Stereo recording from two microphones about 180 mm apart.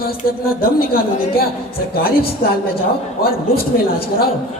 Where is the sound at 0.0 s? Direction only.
55° left (ahead or behind).